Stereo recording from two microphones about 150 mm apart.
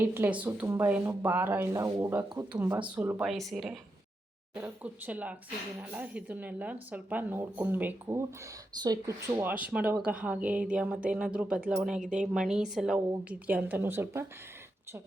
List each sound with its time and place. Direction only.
0.0 s speech: 15° right (ahead or behind)